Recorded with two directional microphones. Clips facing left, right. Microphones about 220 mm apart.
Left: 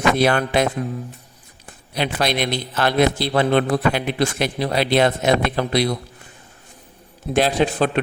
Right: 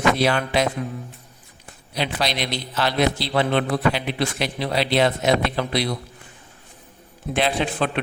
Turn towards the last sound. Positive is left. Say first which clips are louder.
# left 4 dB
turn(degrees=40)  # may be behind; listen again after turning